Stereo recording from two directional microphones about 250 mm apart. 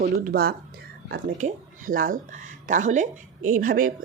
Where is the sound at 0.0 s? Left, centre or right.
Right.